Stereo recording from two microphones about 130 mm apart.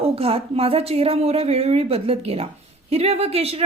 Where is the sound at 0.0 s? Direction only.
50° right (ahead or behind).